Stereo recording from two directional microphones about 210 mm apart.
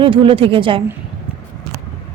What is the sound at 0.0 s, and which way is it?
Speech, 25° right (ahead or behind).